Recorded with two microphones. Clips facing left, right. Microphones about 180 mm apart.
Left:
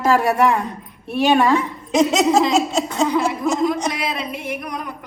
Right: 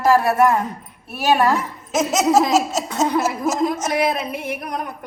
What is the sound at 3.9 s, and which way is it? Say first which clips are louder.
Music: right 6 dB; 55° right (ahead or behind).